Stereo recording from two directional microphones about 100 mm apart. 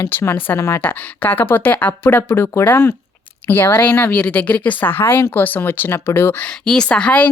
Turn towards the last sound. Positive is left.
turn(degrees=10)  # may be behind; listen again after turning